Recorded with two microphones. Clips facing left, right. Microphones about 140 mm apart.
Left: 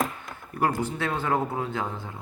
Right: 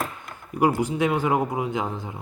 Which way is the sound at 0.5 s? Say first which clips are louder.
Right 5 dB; 15° right (ahead or behind).